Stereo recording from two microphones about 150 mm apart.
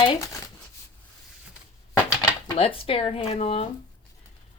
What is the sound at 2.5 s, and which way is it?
Speech, 40° left (ahead or behind).